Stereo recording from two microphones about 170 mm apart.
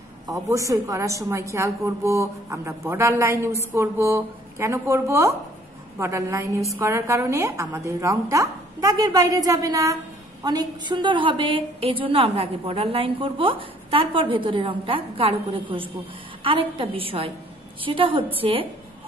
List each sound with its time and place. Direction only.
0.3 s a woman's voice: 20° right (ahead or behind)